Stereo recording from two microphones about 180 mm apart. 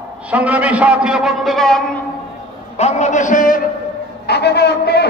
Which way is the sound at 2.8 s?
40° left (ahead or behind).